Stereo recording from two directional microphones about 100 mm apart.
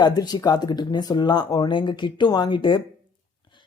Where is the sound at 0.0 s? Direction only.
40° left (ahead or behind).